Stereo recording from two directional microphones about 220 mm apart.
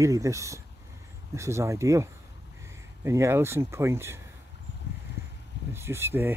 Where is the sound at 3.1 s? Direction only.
10° right (ahead or behind).